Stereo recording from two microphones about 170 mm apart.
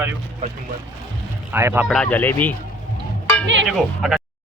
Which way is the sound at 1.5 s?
10° right (ahead or behind).